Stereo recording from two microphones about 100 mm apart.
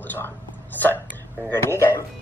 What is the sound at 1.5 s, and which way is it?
Speech, 25° left (ahead or behind).